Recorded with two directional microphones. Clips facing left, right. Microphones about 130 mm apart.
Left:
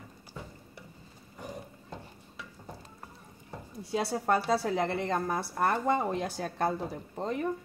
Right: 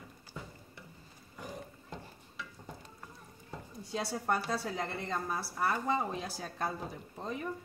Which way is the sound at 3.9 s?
70° left (ahead or behind).